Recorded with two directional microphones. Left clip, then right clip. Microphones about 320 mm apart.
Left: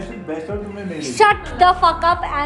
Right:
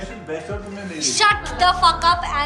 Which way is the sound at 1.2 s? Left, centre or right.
Centre.